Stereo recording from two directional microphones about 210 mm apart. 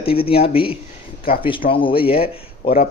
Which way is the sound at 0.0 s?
25° left (ahead or behind).